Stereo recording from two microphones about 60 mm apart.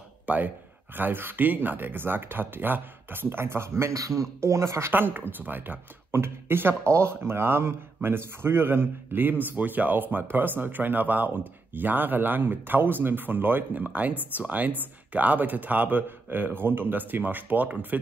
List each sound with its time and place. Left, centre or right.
0.3 s a man's voice: right
3.9 s speech: right
4.9 s a man's voice: right